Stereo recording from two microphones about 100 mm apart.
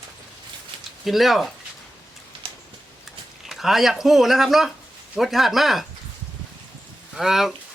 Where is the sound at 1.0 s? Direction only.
Centre (ahead or behind).